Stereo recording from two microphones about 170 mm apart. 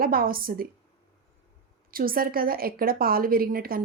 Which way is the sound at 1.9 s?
60° right (ahead or behind).